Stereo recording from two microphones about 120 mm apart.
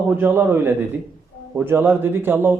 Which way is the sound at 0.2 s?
15° right (ahead or behind).